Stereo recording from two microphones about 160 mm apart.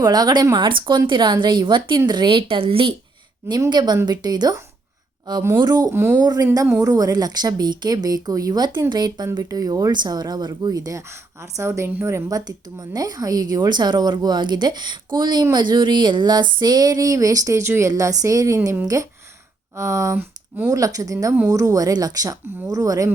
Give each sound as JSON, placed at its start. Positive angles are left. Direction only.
{"t": 0.0, "sound": "speech", "side_deg": -25}